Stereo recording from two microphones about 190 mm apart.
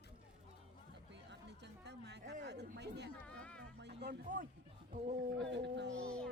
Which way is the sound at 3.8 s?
65° right (ahead or behind).